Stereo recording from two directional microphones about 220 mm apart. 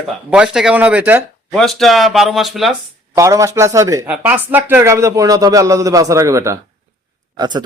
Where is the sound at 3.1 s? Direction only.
15° right (ahead or behind).